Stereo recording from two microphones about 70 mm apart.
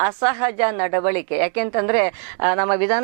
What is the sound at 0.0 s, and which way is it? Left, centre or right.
A woman's voice, centre.